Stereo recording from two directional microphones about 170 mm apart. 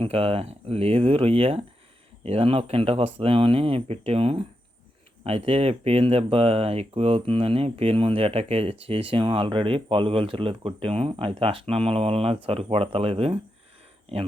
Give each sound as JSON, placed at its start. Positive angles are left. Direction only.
{"t": 0.0, "sound": "speech", "side_deg": -35}